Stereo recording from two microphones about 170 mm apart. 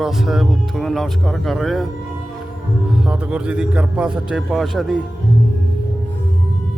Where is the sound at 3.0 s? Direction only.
5° right (ahead or behind).